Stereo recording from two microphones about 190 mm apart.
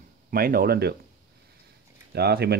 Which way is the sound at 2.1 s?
55° right (ahead or behind).